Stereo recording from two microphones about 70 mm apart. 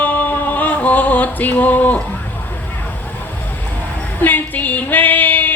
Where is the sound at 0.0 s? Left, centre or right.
Left.